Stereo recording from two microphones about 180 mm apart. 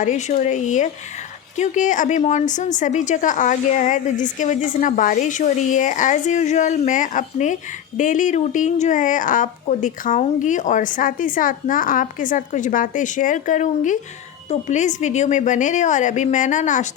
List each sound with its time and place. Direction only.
0.0 s a woman's voice: 40° left (ahead or behind)